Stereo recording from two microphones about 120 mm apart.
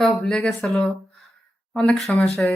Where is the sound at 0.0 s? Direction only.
5° left (ahead or behind).